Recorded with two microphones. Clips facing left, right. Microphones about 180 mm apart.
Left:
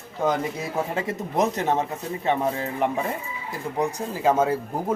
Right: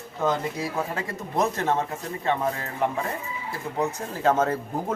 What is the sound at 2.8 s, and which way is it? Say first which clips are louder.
Speech: even; 20° left (ahead or behind).